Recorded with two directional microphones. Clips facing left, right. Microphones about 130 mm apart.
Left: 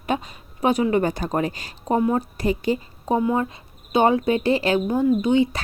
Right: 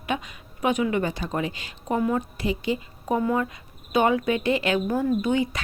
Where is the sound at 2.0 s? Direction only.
25° left (ahead or behind).